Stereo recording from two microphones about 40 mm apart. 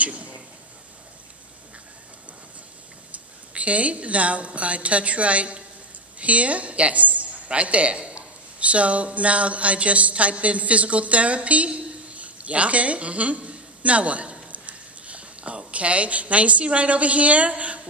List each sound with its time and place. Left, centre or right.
3.1 s a woman's voice: right